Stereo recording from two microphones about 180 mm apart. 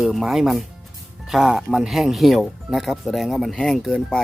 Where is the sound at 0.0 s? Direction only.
Centre (ahead or behind).